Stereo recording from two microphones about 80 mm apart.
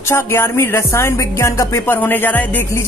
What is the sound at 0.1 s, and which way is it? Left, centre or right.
Speech, left.